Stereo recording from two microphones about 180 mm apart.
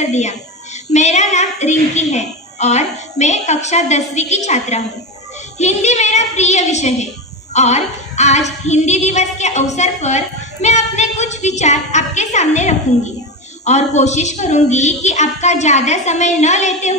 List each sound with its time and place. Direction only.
0.0 s a woman's voice: 40° left (ahead or behind)